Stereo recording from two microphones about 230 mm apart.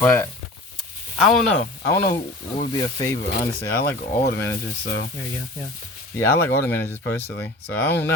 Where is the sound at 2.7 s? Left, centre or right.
Centre.